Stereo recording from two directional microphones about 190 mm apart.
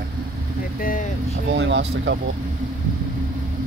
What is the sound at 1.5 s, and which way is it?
Speech, 70° right (ahead or behind).